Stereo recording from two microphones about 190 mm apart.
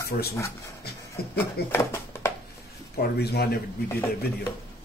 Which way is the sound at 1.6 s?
10° left (ahead or behind).